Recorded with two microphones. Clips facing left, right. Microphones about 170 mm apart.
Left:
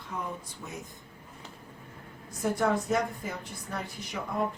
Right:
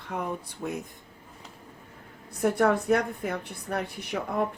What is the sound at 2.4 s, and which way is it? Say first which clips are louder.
A woman's voice: right 4 dB; 60° right (ahead or behind).